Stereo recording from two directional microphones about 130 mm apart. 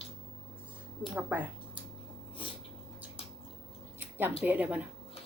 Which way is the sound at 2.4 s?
40° left (ahead or behind).